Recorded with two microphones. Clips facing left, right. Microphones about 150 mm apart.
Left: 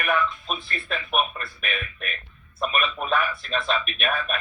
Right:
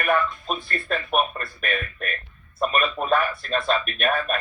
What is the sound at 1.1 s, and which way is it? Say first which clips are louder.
A man's voice: right 1 dB; 45° right (ahead or behind).